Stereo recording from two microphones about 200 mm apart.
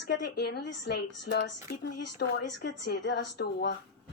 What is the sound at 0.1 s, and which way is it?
A woman's voice, 55° left (ahead or behind).